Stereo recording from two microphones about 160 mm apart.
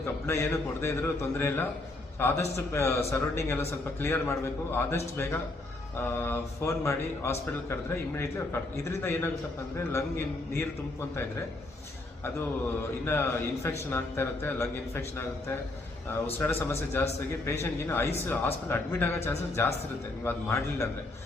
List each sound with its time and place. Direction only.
0.0 s a man's voice: 15° left (ahead or behind)
6.0 s a man's voice: 15° left (ahead or behind)
13.1 s a man's voice: 15° left (ahead or behind)
16.4 s a man's voice: 15° left (ahead or behind)